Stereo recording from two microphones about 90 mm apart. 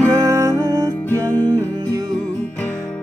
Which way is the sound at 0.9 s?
25° left (ahead or behind).